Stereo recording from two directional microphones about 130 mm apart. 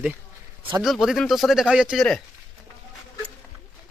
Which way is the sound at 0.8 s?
Centre (ahead or behind).